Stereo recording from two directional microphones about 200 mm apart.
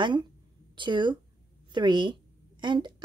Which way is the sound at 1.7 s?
25° right (ahead or behind).